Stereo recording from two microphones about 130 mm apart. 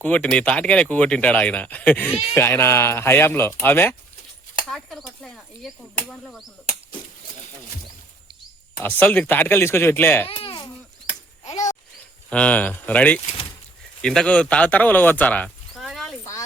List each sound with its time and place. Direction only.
0.0 s speech: 10° left (ahead or behind)
4.7 s speech: 5° left (ahead or behind)
8.8 s speech: 15° left (ahead or behind)
10.2 s speech: 45° left (ahead or behind)
11.4 s a sound: 65° left (ahead or behind)
12.3 s speech: 10° left (ahead or behind)
15.4 s a sound: centre (ahead or behind)